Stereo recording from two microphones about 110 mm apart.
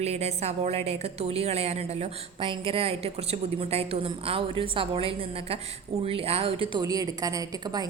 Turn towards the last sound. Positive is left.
turn(degrees=-35)  # may be behind; listen again after turning